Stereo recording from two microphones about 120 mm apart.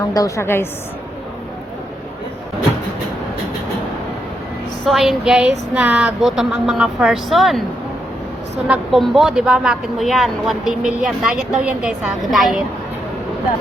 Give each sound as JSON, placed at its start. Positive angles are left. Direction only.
{"t": 0.1, "sound": "a woman's voice", "side_deg": 30}
{"t": 4.9, "sound": "speech", "side_deg": 0}
{"t": 8.6, "sound": "a woman's voice", "side_deg": 0}